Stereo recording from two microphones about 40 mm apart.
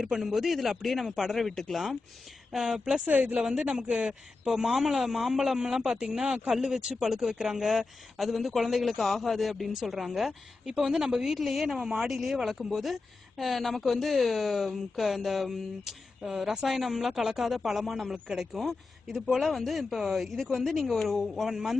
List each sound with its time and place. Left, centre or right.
0.0 s a man's voice: centre
3.1 s speech: right
3.4 s a man's voice: centre
3.7 s speech: right
4.5 s a man's voice: centre
11.3 s a man's voice: centre
18.6 s speech: centre